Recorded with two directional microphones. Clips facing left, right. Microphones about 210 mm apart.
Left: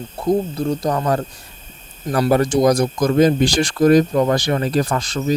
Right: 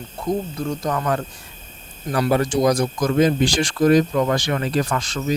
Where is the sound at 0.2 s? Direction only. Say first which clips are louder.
Left 5 dB; 35° left (ahead or behind).